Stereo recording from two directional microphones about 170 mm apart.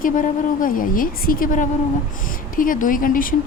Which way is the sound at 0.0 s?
55° left (ahead or behind).